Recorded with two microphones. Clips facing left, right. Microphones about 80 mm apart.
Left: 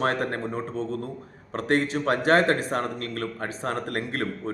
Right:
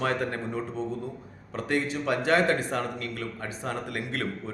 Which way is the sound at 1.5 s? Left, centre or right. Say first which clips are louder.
Left 4 dB; left.